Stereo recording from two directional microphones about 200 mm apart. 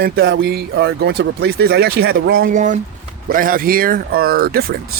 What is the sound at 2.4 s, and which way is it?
Speech, 40° right (ahead or behind).